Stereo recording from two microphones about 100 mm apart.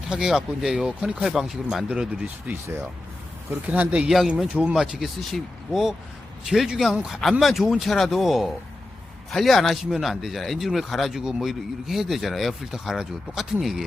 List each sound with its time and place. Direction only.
0.1 s speech: 5° right (ahead or behind)
2.2 s speech: 25° right (ahead or behind); by 13.8 s 5° right (ahead or behind)